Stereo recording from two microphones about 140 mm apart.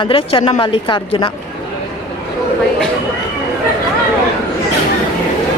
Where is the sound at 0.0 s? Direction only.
40° left (ahead or behind).